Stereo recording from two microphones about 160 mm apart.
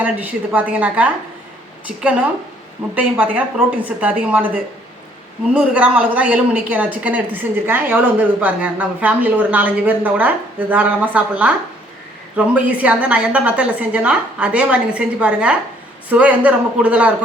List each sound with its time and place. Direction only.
0.0 s speech: 10° right (ahead or behind)